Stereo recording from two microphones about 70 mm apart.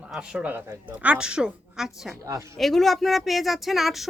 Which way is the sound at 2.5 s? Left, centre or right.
Centre.